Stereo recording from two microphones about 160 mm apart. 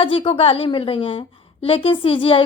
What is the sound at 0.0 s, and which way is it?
A woman's voice, 35° left (ahead or behind).